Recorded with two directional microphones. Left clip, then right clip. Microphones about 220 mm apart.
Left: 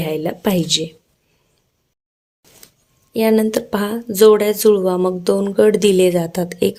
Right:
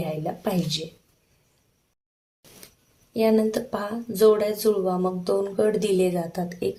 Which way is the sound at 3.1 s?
35° left (ahead or behind).